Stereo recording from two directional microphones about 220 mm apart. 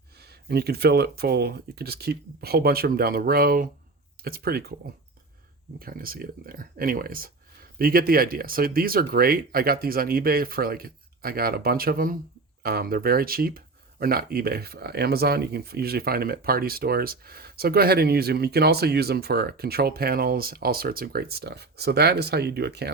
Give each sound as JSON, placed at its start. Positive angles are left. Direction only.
{"t": 0.2, "sound": "speech", "side_deg": -45}
{"t": 5.8, "sound": "speech", "side_deg": -40}